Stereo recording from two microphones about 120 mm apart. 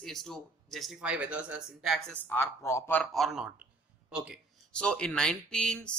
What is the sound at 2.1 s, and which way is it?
Speech, 15° left (ahead or behind).